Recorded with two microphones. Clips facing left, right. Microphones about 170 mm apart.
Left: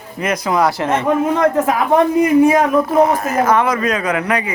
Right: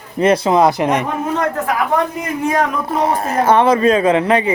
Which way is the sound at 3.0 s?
30° right (ahead or behind).